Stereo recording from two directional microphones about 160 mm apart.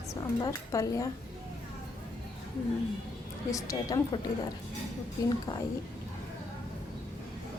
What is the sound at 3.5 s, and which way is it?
Speech, 20° left (ahead or behind).